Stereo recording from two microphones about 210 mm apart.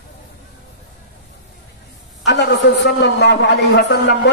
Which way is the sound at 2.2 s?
55° left (ahead or behind).